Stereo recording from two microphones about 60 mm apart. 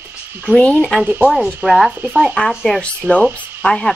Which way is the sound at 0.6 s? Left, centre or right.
Left.